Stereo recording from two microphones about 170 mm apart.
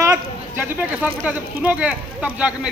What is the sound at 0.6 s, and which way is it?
A man's voice, 10° right (ahead or behind).